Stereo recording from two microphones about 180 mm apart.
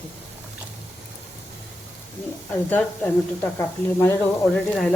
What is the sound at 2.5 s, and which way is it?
Speech, 10° left (ahead or behind).